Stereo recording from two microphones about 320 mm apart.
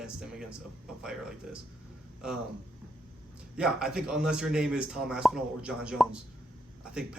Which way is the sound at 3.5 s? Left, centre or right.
Centre.